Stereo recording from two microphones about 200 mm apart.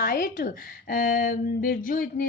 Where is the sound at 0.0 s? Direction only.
45° left (ahead or behind).